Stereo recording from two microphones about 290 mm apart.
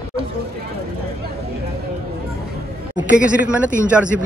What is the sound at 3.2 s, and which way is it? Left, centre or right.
Speech, centre.